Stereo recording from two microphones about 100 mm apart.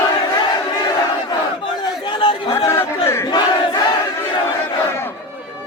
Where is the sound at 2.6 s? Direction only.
30° left (ahead or behind).